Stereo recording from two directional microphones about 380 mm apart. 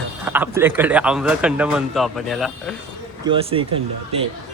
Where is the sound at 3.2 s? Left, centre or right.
Centre.